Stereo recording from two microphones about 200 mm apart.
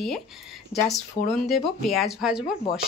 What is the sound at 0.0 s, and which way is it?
Speech, centre (ahead or behind).